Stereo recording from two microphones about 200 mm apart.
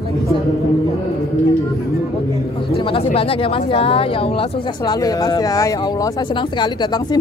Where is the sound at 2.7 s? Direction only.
30° left (ahead or behind).